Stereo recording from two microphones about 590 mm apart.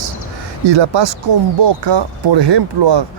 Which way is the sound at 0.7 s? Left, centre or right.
Right.